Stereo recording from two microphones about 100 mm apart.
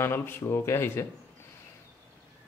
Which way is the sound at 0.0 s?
25° left (ahead or behind).